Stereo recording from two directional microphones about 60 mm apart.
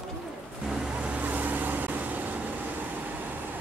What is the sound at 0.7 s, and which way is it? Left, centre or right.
Vehicle, centre.